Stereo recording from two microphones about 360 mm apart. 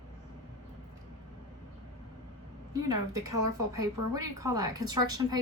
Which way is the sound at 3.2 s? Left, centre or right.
Right.